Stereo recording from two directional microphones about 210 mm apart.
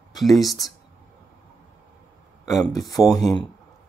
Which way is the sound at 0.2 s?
Centre (ahead or behind).